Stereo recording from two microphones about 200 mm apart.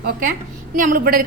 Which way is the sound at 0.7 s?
45° right (ahead or behind).